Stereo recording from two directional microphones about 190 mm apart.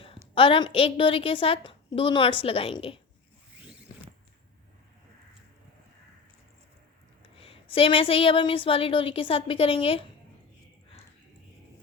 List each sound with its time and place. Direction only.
0.0 s a woman's voice: 30° left (ahead or behind)
7.3 s a woman's voice: 30° left (ahead or behind)